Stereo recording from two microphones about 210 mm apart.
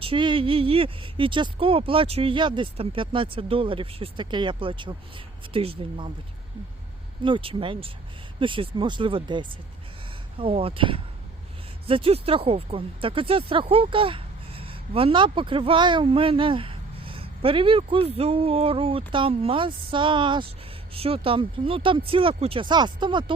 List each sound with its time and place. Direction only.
0.0 s speech: 25° right (ahead or behind)
7.3 s speech: 25° right (ahead or behind)